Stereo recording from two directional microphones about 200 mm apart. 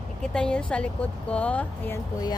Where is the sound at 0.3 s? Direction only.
5° left (ahead or behind).